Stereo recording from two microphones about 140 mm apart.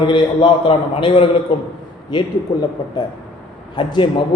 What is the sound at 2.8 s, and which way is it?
A man's voice, 30° left (ahead or behind).